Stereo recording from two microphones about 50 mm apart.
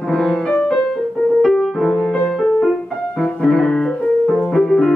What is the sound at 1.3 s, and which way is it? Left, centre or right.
Music, centre.